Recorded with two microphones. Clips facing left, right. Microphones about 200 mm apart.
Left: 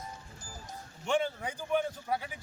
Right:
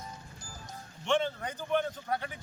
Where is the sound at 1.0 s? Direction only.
10° left (ahead or behind).